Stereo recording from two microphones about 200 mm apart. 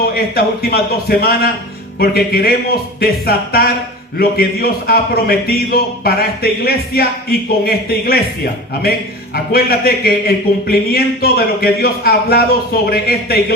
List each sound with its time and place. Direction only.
0.0 s a man's voice: 50° left (ahead or behind)